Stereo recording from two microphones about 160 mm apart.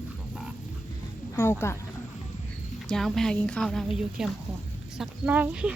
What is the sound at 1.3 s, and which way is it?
Speech, 15° left (ahead or behind).